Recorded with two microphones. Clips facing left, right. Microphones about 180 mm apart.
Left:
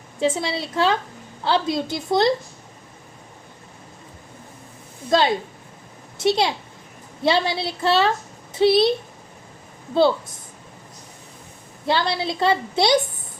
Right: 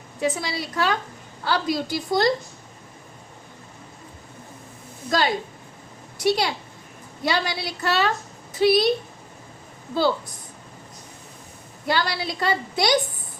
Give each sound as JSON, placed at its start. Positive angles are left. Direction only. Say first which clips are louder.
{"t": 0.2, "sound": "a woman's voice", "louder": "left 3 dB", "side_deg": 25}
{"t": 5.1, "sound": "a woman's voice", "louder": "left 4 dB", "side_deg": 25}
{"t": 9.9, "sound": "a woman's voice", "louder": "left 4 dB", "side_deg": 25}
{"t": 11.9, "sound": "a woman's voice", "louder": "left 3 dB", "side_deg": 25}